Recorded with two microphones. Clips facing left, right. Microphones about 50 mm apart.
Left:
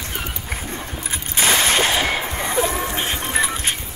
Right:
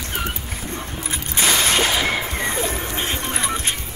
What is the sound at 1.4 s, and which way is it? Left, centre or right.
Whip, left.